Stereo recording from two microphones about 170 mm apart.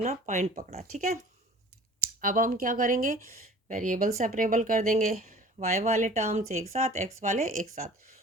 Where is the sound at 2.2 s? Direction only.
55° right (ahead or behind).